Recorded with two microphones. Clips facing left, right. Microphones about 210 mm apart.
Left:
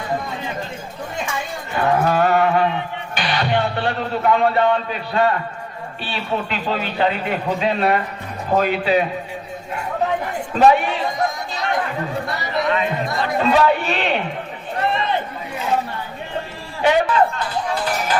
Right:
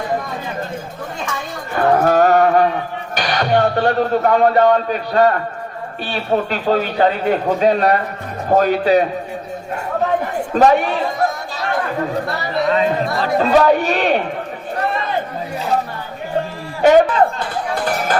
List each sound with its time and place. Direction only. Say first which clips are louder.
1.7 s music: right 4 dB; 45° right (ahead or behind)
6.1 s a man's voice: right 6 dB; 45° right (ahead or behind)
10.5 s a man's voice: right 1 dB; 45° right (ahead or behind)
12.6 s speech: right 6 dB; 35° right (ahead or behind)
16.8 s a man's voice: right 5 dB; 45° right (ahead or behind)